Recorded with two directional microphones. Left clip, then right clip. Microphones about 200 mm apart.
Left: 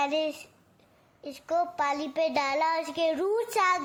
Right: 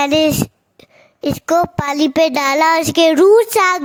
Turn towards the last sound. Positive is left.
turn(degrees=-55)  # may be behind; listen again after turning